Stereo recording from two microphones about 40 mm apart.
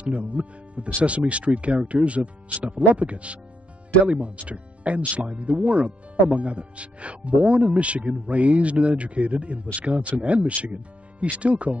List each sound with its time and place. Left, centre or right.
0.0 s speech: right